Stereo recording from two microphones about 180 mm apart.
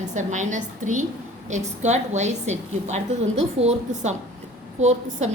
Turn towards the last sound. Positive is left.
turn(degrees=-40)  # may be behind; listen again after turning